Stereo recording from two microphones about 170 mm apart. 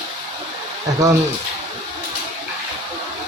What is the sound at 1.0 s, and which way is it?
Speech, 20° right (ahead or behind).